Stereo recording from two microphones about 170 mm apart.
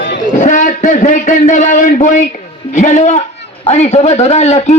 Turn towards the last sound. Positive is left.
turn(degrees=40)  # may be behind; listen again after turning